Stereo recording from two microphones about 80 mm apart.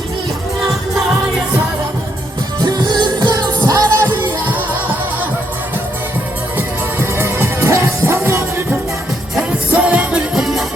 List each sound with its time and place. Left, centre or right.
2.6 s music: right
3.3 s music: right
4.0 s music: right
6.6 s music: right
9.7 s music: centre